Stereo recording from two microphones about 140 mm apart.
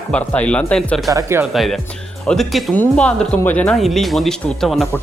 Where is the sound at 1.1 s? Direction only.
20° right (ahead or behind).